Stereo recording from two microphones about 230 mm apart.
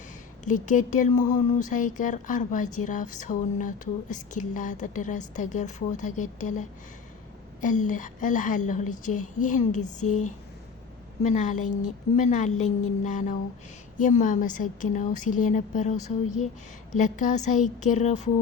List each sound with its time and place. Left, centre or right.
0.4 s a woman's voice: left
10.1 s speech: left
11.2 s a woman's voice: left